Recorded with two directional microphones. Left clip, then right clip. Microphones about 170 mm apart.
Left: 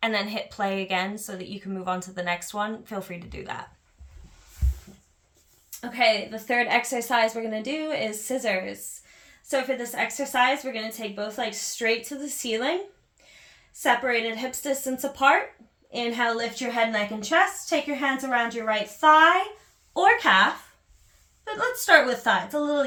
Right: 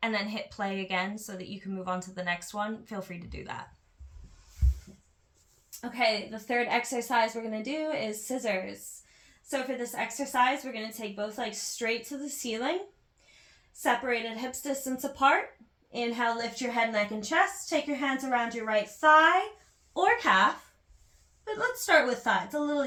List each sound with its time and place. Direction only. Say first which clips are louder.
0.0 s a woman's voice: left 5 dB; 15° left (ahead or behind)
4.6 s a sound: left 1 dB; 5° left (ahead or behind)
6.0 s a woman's voice: left 6 dB; 25° left (ahead or behind)
13.8 s a woman's voice: left 5 dB; 30° left (ahead or behind)